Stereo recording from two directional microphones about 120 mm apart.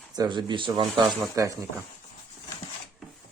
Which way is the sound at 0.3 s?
40° right (ahead or behind).